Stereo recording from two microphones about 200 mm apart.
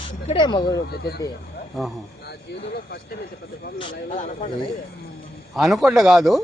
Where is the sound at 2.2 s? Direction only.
55° left (ahead or behind).